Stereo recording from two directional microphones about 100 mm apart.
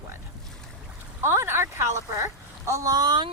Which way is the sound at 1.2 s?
25° right (ahead or behind).